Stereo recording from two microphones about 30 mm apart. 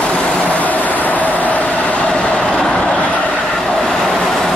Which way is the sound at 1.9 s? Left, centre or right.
Left.